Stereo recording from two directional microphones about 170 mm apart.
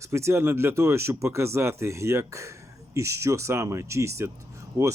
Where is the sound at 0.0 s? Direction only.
15° right (ahead or behind).